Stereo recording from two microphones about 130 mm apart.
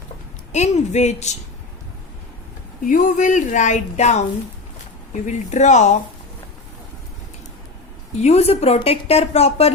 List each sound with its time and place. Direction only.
0.5 s speech: 60° left (ahead or behind)
2.8 s a woman's voice: 90° left; by 6.0 s 65° left (ahead or behind)
8.2 s a woman's voice: 55° left (ahead or behind)